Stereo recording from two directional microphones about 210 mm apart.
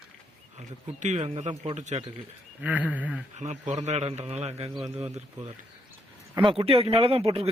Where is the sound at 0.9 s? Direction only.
35° right (ahead or behind).